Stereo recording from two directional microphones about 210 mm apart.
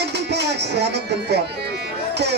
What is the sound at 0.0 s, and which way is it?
Speech, 55° right (ahead or behind).